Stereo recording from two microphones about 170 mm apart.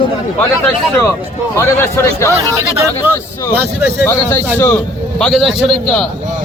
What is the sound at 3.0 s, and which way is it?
Speech, 15° right (ahead or behind).